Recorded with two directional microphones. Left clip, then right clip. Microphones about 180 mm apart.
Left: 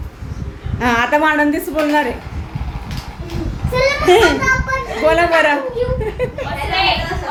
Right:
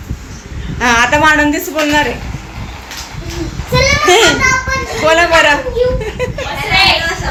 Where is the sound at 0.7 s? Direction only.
10° left (ahead or behind).